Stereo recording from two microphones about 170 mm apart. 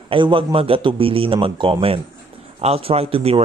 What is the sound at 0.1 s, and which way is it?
Speech, 30° right (ahead or behind).